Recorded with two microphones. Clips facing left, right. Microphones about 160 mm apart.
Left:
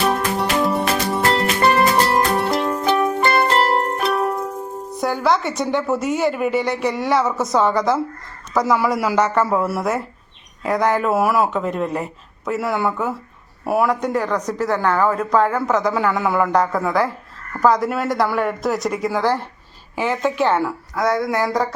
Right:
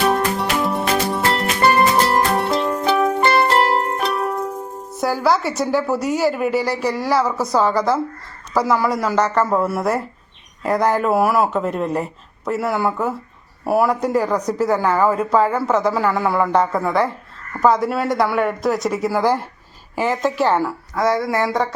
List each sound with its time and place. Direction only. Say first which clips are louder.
0.1 s music: right 1 dB; centre (ahead or behind)
4.9 s speech: right 1 dB; 5° right (ahead or behind)